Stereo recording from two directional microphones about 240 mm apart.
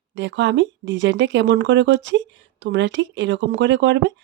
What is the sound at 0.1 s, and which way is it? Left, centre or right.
Speech, right.